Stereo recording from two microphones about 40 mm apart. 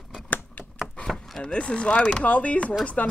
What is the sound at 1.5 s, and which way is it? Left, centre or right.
Speech, left.